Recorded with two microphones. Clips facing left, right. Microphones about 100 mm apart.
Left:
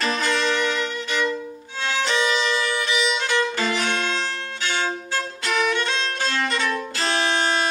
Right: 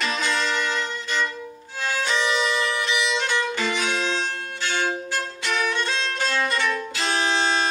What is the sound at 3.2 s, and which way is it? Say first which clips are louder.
Violin: left 2 dB; 5° left (ahead or behind).